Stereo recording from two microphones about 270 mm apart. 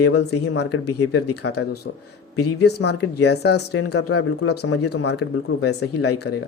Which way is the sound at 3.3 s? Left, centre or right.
Left.